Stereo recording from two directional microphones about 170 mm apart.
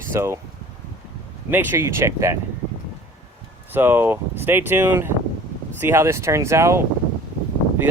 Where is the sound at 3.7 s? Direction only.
10° right (ahead or behind).